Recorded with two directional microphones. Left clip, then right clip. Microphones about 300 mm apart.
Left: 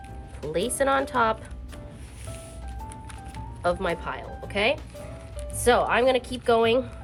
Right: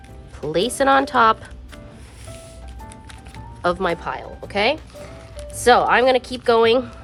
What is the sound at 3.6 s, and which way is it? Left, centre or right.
Speech, right.